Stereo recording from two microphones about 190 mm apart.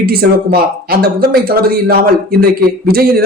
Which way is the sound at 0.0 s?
50° right (ahead or behind).